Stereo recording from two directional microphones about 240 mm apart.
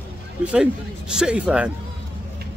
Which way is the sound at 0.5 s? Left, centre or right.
Centre.